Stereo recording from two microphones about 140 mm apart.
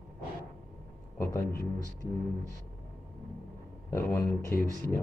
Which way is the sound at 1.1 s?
15° left (ahead or behind).